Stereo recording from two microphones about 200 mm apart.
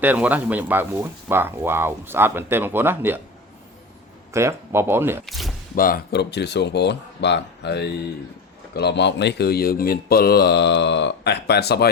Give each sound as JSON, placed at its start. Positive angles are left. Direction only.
{"t": 0.0, "sound": "speech", "side_deg": -10}
{"t": 4.3, "sound": "speech", "side_deg": -15}
{"t": 5.2, "sound": "speech", "side_deg": 0}
{"t": 5.7, "sound": "speech", "side_deg": 45}